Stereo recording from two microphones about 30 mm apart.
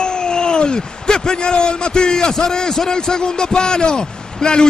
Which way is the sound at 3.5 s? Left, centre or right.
Left.